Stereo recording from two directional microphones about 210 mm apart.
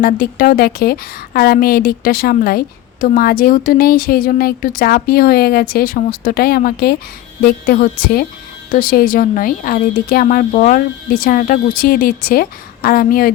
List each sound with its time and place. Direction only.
0.0 s a woman's voice: 45° left (ahead or behind)